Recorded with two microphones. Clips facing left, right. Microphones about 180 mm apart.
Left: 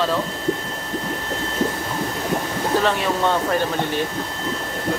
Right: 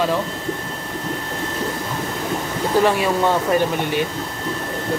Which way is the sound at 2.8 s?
10° right (ahead or behind).